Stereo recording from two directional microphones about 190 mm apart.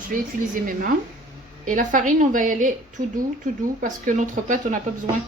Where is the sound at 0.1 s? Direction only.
45° right (ahead or behind).